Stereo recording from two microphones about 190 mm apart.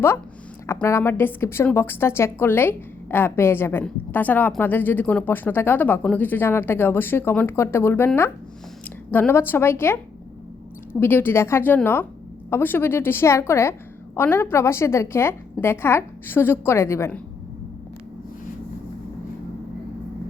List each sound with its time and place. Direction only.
0.7 s a woman's voice: 15° left (ahead or behind)
11.0 s a woman's voice: 10° left (ahead or behind)